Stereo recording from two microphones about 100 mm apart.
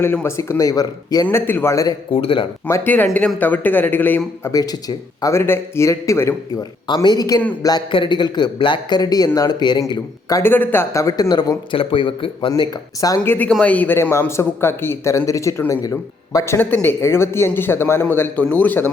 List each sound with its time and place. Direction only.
0.0 s a man's voice: 20° left (ahead or behind); by 1.3 s 40° left (ahead or behind)
1.3 s a man's voice: 20° left (ahead or behind)
1.7 s speech: 35° left (ahead or behind)
2.1 s speech: 65° left (ahead or behind)
2.6 s a man's voice: 25° left (ahead or behind)
4.5 s speech: 40° left (ahead or behind)
5.3 s a man's voice: 25° left (ahead or behind)
6.6 s a man's voice: 50° left (ahead or behind)
7.9 s a man's voice: 55° left (ahead or behind); by 10.4 s 35° left (ahead or behind)
10.4 s a man's voice: 20° left (ahead or behind)
11.0 s speech: 40° left (ahead or behind)
11.7 s speech: 60° left (ahead or behind)
12.5 s speech: 40° left (ahead or behind)
13.2 s a man's voice: 20° left (ahead or behind)